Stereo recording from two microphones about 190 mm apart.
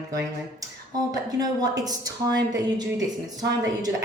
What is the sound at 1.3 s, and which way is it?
A woman's voice, 20° right (ahead or behind).